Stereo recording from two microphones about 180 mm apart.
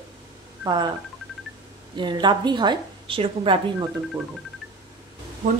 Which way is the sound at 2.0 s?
25° right (ahead or behind).